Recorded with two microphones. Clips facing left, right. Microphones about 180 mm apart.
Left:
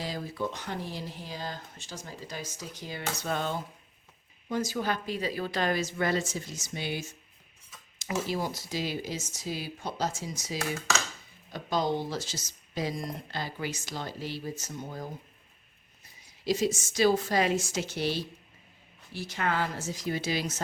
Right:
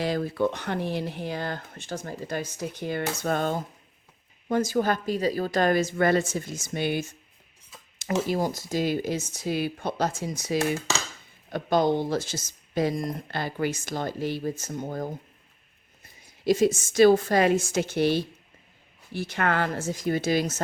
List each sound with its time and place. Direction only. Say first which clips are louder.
0.0 s speech: right 8 dB; 60° right (ahead or behind)
8.3 s speech: right 6 dB; 45° right (ahead or behind)
16.4 s speech: right 6 dB; 55° right (ahead or behind)